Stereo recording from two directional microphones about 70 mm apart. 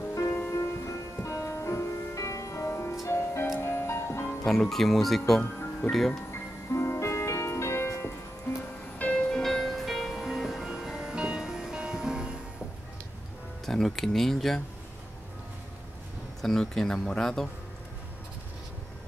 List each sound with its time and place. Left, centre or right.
0.1 s music: left
4.5 s speech: centre
6.7 s music: left
8.9 s music: centre
9.3 s music: centre
13.7 s speech: centre
16.3 s speech: centre